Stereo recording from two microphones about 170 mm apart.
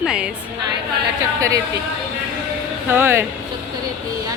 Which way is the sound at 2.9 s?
15° right (ahead or behind).